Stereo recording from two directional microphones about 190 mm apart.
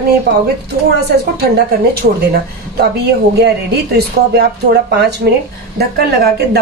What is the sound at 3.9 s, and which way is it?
Speech, 60° right (ahead or behind).